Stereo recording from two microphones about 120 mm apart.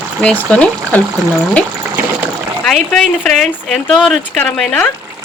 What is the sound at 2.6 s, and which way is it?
Speech, 5° left (ahead or behind).